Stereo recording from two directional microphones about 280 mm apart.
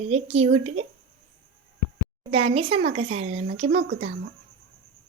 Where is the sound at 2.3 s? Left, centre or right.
Right.